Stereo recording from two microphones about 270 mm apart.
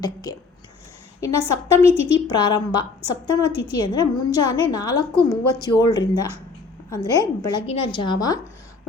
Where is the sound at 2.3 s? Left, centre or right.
Centre.